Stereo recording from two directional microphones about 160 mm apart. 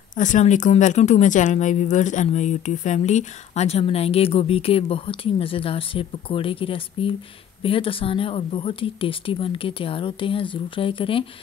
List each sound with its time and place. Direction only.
0.1 s speech: 50° left (ahead or behind); by 11.2 s 35° left (ahead or behind)